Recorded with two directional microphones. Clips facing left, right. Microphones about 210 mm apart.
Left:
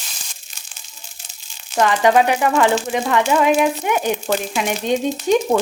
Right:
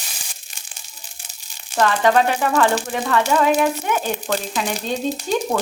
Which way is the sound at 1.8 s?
15° left (ahead or behind).